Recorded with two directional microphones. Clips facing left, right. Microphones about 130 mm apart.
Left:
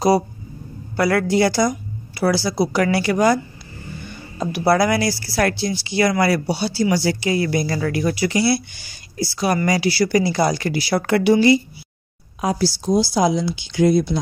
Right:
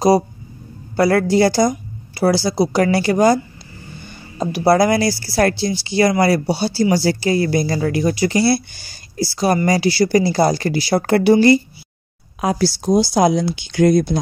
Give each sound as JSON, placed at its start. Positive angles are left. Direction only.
{"t": 0.9, "sound": "speech", "side_deg": -35}
{"t": 1.7, "sound": "a sound", "side_deg": -30}
{"t": 2.6, "sound": "speech", "side_deg": -30}
{"t": 4.4, "sound": "speech", "side_deg": -30}
{"t": 7.7, "sound": "speech", "side_deg": -25}
{"t": 12.4, "sound": "speech", "side_deg": -65}